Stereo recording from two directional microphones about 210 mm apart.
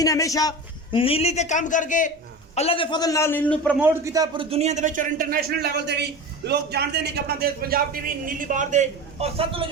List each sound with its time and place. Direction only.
0.0 s a man's voice: 15° left (ahead or behind)
0.9 s a man's voice: 25° left (ahead or behind)
2.6 s a man's voice: 25° left (ahead or behind); by 3.8 s 5° left (ahead or behind)
3.8 s a man's voice: 10° right (ahead or behind)